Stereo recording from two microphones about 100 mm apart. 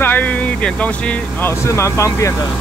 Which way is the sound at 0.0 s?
15° left (ahead or behind).